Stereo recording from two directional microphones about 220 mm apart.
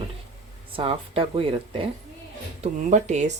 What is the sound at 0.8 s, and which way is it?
Speech, 25° right (ahead or behind).